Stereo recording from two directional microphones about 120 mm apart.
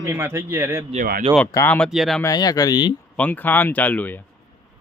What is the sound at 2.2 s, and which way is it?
Speech, 30° left (ahead or behind).